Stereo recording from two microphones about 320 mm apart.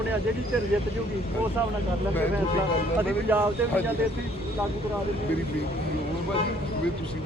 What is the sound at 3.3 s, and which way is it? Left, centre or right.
Speech, centre.